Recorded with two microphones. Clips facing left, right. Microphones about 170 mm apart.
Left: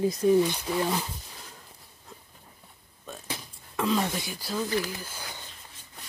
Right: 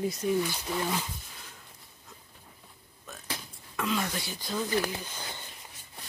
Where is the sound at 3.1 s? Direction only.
30° left (ahead or behind).